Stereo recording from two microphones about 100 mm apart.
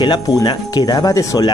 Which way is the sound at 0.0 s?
45° left (ahead or behind).